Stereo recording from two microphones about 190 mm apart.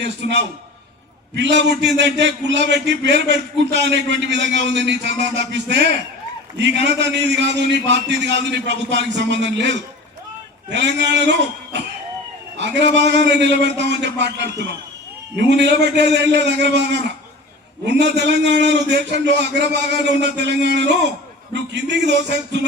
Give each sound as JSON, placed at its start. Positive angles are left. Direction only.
{"t": 0.0, "sound": "a man's voice", "side_deg": -65}